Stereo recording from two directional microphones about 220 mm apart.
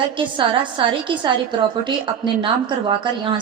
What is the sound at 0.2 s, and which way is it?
A woman's voice, 20° right (ahead or behind).